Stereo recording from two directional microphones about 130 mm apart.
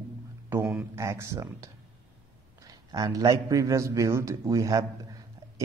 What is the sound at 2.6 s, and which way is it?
A man's voice, 30° right (ahead or behind).